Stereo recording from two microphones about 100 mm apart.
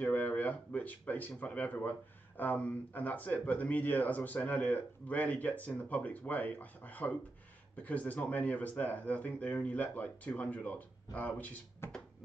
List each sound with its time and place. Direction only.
0.0 s speech: 15° left (ahead or behind)